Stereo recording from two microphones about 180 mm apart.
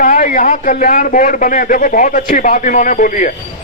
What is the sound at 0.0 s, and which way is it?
Speech, 45° left (ahead or behind).